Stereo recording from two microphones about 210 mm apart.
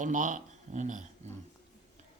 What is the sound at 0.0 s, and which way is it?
Speech, 40° right (ahead or behind).